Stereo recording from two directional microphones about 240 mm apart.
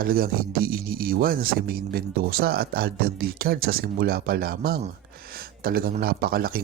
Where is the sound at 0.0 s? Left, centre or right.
Right.